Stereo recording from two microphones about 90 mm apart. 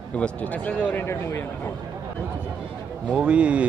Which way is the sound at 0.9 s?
30° left (ahead or behind).